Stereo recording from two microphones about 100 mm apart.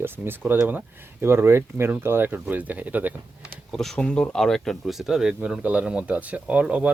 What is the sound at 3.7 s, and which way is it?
Speech, 5° left (ahead or behind).